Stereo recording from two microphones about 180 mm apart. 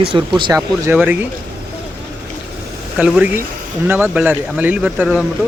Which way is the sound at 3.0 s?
10° right (ahead or behind).